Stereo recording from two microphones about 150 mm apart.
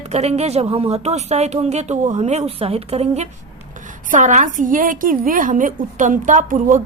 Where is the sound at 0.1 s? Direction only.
45° right (ahead or behind).